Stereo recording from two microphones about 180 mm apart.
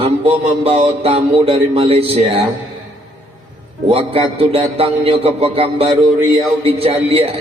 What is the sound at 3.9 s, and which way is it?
Speech, 30° right (ahead or behind).